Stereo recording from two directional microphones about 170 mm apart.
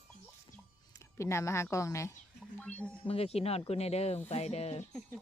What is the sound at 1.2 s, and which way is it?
A woman's voice, 15° left (ahead or behind).